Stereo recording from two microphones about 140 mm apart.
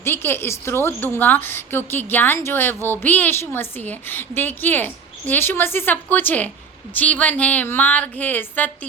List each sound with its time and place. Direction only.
0.0 s a woman's voice: 15° left (ahead or behind)